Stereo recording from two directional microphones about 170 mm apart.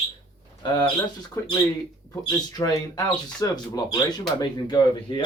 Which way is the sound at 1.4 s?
20° left (ahead or behind).